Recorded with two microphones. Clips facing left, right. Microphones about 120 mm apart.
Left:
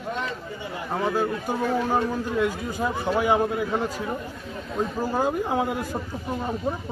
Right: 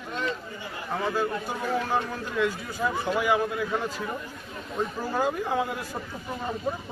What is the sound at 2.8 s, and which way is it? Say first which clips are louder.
Speech: left 2 dB; 35° left (ahead or behind).